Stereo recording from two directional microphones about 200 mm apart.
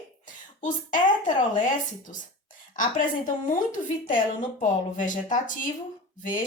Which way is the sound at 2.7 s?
40° left (ahead or behind).